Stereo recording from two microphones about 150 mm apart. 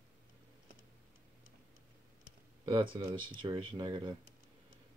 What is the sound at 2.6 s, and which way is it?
Speech, 35° right (ahead or behind).